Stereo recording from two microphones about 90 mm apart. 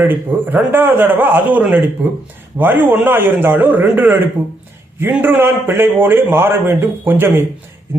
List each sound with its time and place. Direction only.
0.0 s a man's voice: 20° right (ahead or behind)